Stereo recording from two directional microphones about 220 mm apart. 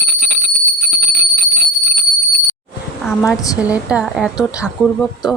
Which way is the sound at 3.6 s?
5° right (ahead or behind).